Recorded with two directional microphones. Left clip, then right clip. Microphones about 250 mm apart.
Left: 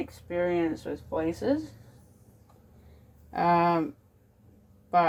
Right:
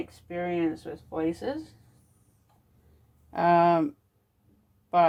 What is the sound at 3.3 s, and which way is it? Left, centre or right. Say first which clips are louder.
Speech: right 2 dB; right.